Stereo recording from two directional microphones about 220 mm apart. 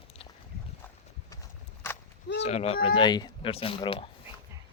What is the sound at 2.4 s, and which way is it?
Speech, 30° left (ahead or behind).